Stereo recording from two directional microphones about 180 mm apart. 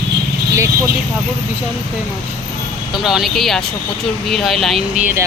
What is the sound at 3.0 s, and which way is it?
Speech, centre (ahead or behind).